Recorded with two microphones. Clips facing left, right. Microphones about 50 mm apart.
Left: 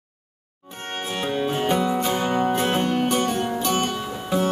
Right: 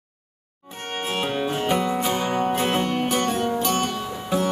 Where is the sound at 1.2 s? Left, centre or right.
Centre.